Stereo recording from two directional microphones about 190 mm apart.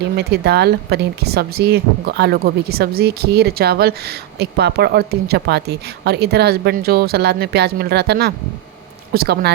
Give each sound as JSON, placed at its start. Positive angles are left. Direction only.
{"t": 0.2, "sound": "speech", "side_deg": -60}